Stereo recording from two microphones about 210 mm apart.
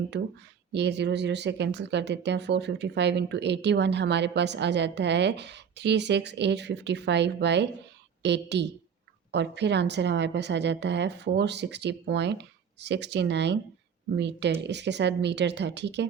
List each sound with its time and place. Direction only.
0.7 s speech: 55° right (ahead or behind)